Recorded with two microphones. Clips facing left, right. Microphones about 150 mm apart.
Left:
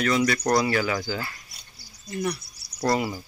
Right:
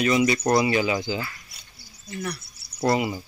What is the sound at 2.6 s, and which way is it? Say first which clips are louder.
Cricket: right 2 dB; 20° right (ahead or behind).